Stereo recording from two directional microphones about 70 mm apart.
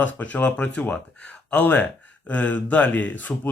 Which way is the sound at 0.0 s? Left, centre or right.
Left.